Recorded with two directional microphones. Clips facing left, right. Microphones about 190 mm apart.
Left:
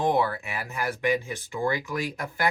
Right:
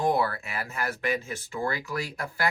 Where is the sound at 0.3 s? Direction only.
15° left (ahead or behind).